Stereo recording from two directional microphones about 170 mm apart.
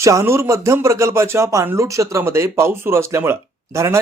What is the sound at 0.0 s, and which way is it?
A man's voice, 15° right (ahead or behind).